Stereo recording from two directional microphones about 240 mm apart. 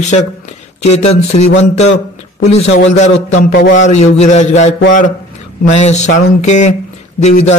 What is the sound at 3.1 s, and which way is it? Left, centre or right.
Speech, left.